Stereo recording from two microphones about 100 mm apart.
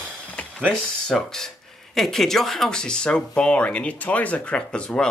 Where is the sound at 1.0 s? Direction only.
5° left (ahead or behind).